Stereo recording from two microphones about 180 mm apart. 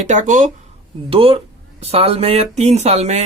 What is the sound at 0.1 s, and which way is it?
Speech, 45° right (ahead or behind).